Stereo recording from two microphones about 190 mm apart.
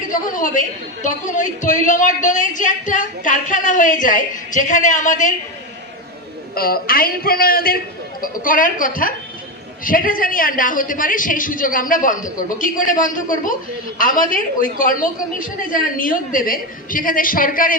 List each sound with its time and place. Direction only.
0.1 s a woman's voice: 45° left (ahead or behind)
6.5 s a woman's voice: 50° left (ahead or behind)